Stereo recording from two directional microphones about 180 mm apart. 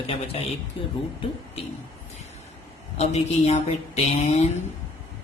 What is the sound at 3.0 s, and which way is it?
Speech, 35° left (ahead or behind).